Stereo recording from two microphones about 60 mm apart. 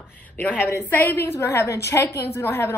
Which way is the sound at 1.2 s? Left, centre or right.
Left.